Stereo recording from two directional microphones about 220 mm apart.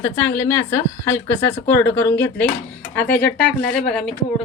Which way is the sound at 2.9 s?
5° left (ahead or behind).